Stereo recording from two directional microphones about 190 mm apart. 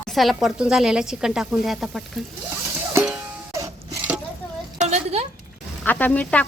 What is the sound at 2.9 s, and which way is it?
Cowbell, 5° right (ahead or behind).